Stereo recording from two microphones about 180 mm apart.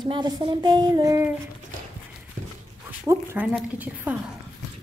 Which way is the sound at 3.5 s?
10° right (ahead or behind).